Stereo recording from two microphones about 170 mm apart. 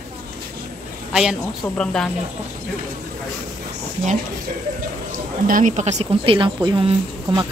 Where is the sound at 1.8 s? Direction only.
5° left (ahead or behind).